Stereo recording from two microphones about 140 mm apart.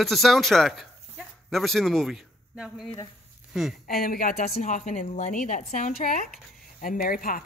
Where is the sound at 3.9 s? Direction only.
90° left.